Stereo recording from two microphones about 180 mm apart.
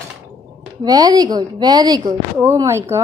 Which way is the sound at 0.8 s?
20° right (ahead or behind).